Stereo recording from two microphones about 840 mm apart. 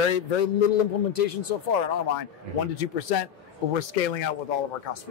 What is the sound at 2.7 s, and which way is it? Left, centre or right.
Speech, left.